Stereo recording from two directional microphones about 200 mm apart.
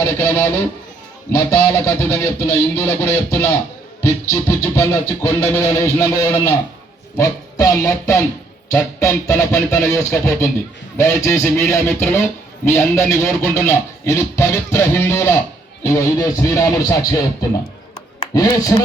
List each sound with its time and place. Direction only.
0.0 s speech: 10° left (ahead or behind)
18.3 s speech: 15° left (ahead or behind)